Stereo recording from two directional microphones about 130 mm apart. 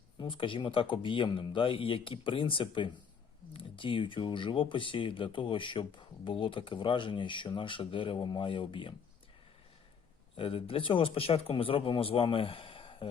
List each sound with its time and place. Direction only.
0.2 s speech: 40° left (ahead or behind)
10.3 s speech: 45° left (ahead or behind)